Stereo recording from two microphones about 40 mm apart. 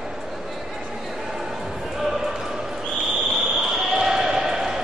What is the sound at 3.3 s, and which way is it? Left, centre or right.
Basketball bounce, centre.